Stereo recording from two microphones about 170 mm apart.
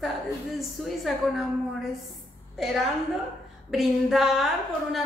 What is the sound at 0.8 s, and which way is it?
Speech, centre (ahead or behind).